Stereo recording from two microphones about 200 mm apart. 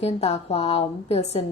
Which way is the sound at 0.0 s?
30° left (ahead or behind).